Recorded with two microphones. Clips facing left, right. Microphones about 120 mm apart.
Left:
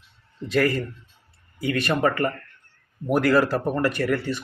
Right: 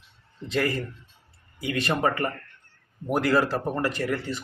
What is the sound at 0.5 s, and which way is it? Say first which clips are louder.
Speech: left 4 dB; 20° right (ahead or behind).